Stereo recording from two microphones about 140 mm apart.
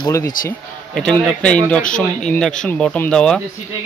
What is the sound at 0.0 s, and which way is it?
Speech, 20° left (ahead or behind).